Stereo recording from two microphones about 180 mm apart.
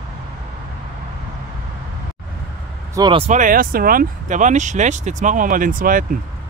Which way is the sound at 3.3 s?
45° right (ahead or behind).